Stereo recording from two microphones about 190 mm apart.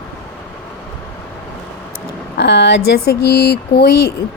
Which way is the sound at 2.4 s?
65° left (ahead or behind).